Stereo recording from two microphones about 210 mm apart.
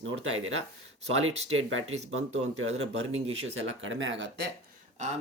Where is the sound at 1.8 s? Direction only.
30° right (ahead or behind).